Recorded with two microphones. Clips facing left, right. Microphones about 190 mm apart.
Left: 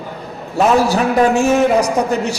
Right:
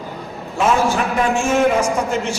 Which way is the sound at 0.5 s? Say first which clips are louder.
Left 4 dB; 40° left (ahead or behind).